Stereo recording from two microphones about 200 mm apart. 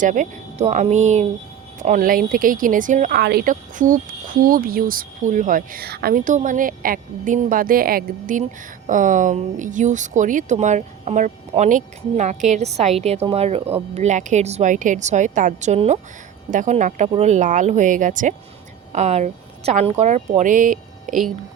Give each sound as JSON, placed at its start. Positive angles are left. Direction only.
{"t": 0.0, "sound": "speech", "side_deg": -40}
{"t": 3.2, "sound": "speech", "side_deg": -55}